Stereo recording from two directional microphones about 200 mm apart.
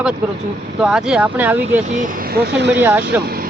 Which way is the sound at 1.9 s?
40° right (ahead or behind).